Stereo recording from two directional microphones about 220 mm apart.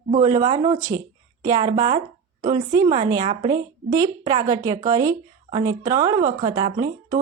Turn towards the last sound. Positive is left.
turn(degrees=-15)  # may be behind; listen again after turning